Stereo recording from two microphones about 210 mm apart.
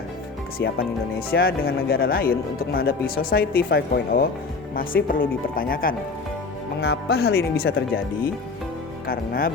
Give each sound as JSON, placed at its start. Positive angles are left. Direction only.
{"t": 0.6, "sound": "speech", "side_deg": 45}